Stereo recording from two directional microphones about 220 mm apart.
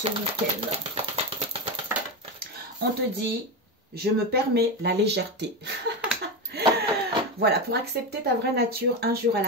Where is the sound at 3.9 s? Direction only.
45° right (ahead or behind).